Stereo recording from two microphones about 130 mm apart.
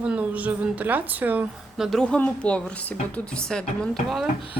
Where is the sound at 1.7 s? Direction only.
Centre (ahead or behind).